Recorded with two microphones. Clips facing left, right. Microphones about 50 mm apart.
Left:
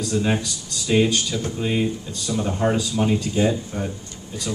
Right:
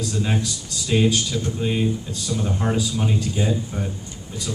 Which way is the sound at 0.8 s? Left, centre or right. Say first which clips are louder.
Left 1 dB; centre.